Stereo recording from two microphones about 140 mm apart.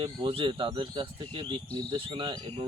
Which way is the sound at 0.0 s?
40° right (ahead or behind).